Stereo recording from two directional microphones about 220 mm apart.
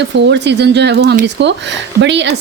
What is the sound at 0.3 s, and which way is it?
A woman's voice, 50° right (ahead or behind).